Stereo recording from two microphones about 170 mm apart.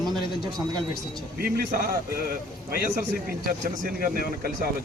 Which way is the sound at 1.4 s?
60° right (ahead or behind).